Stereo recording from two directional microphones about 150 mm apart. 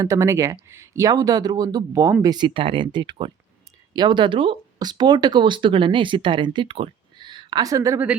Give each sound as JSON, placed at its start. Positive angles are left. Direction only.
{"t": 0.0, "sound": "speech", "side_deg": -20}